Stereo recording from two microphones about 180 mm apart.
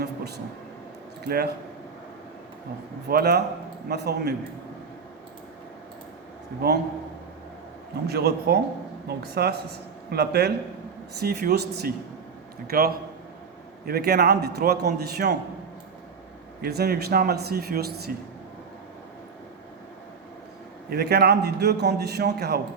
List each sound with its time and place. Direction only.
0.0 s vehicle: 65° right (ahead or behind)
1.2 s a man's voice: 60° right (ahead or behind)
3.1 s a man's voice: 60° right (ahead or behind)
8.0 s a man's voice: 60° right (ahead or behind)
16.6 s a man's voice: 60° right (ahead or behind)
20.9 s a man's voice: 65° right (ahead or behind)